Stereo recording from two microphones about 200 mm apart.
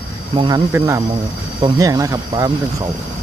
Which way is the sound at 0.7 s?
10° right (ahead or behind).